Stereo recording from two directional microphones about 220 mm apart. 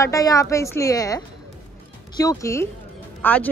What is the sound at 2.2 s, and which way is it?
Speech, 15° left (ahead or behind).